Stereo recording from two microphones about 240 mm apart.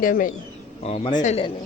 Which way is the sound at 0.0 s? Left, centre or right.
Left.